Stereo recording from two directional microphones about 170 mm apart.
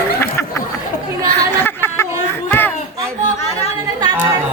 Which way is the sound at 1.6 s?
15° left (ahead or behind).